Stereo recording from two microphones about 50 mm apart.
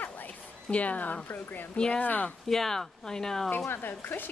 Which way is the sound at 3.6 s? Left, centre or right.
Left.